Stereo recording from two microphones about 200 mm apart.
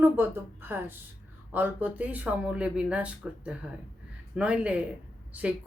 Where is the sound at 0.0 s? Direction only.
10° right (ahead or behind).